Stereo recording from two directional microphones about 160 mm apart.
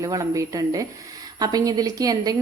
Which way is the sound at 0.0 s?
20° right (ahead or behind).